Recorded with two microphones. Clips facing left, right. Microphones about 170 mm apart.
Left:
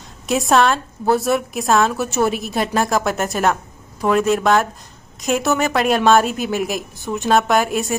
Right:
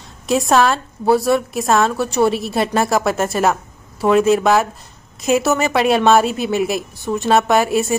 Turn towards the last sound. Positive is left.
turn(degrees=0)  # may be behind; listen again after turning